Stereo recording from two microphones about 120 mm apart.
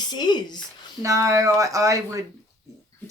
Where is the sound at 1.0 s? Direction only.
25° right (ahead or behind).